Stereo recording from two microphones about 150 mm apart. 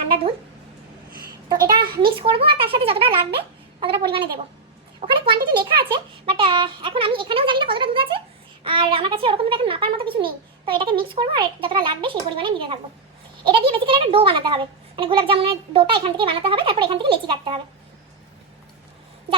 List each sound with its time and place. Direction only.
1.5 s a child's voice: 30° right (ahead or behind)